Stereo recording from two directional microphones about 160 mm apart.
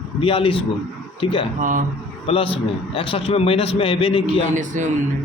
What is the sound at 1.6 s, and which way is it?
Speech, 55° right (ahead or behind).